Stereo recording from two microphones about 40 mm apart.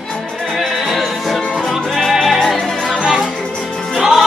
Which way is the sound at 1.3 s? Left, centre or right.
Centre.